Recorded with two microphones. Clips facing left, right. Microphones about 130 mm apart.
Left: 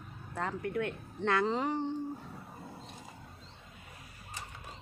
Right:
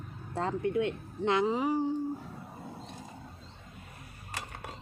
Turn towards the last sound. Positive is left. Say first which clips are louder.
# right 5 dB
turn(degrees=-75)  # may be behind; listen again after turning